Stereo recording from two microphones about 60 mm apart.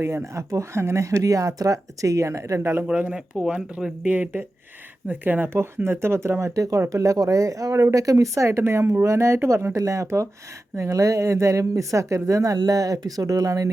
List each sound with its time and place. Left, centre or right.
0.0 s a woman's voice: right
2.8 s speech: centre
4.0 s speech: right
9.7 s a woman's voice: right